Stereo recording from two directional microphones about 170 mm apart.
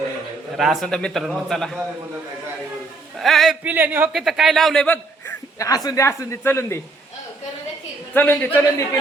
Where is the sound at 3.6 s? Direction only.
10° right (ahead or behind); by 6.8 s 15° left (ahead or behind).